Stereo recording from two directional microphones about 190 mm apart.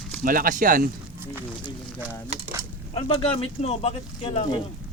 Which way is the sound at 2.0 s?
10° right (ahead or behind).